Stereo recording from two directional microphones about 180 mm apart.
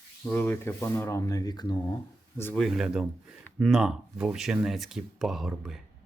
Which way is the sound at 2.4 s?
5° left (ahead or behind).